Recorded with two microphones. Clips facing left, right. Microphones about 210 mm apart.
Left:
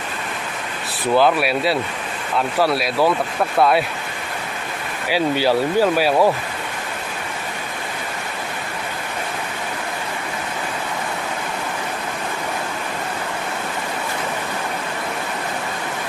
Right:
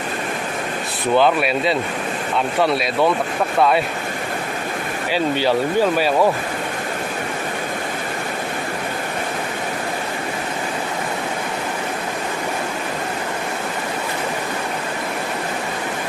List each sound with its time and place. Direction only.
1.1 s speech: 5° left (ahead or behind)
5.0 s speech: 10° left (ahead or behind)